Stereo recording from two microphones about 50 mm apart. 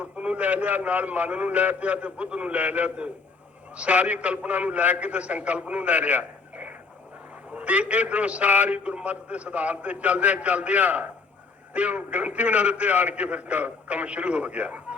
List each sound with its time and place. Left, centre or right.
0.0 s a man's voice: right